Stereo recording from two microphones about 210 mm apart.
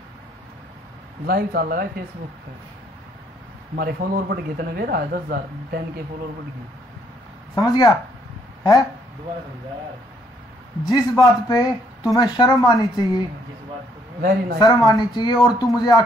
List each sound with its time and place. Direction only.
1.2 s speech: 45° right (ahead or behind)
3.7 s speech: 45° right (ahead or behind)
7.5 s speech: 20° left (ahead or behind)
10.9 s speech: 20° left (ahead or behind)
14.6 s speech: 15° left (ahead or behind)